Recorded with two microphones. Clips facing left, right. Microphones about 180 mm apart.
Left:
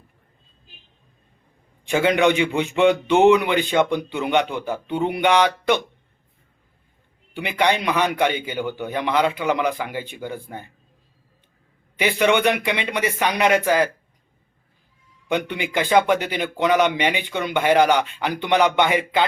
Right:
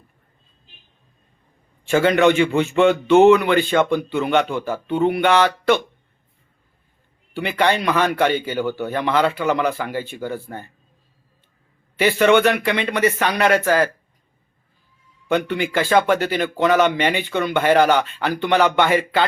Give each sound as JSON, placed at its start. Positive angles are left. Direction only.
{"t": 1.8, "sound": "a man's voice", "side_deg": 15}
{"t": 7.3, "sound": "a man's voice", "side_deg": 15}
{"t": 11.9, "sound": "a man's voice", "side_deg": 15}
{"t": 15.3, "sound": "a man's voice", "side_deg": 15}